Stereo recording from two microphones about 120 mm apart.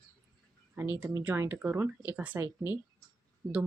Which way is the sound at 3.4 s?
30° right (ahead or behind).